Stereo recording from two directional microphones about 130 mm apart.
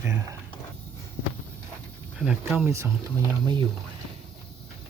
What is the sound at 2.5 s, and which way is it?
Speech, 20° right (ahead or behind).